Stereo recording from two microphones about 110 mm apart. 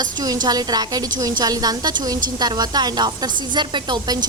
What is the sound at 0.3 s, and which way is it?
A woman's voice, 35° right (ahead or behind).